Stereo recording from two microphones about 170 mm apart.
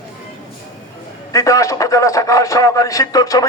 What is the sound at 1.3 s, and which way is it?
A man's voice, 20° left (ahead or behind).